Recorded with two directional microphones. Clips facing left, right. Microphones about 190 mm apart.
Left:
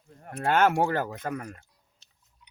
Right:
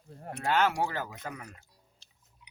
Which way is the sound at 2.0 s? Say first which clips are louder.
Right 2 dB; 30° right (ahead or behind).